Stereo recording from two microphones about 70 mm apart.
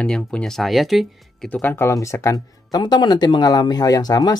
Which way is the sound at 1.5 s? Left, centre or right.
Left.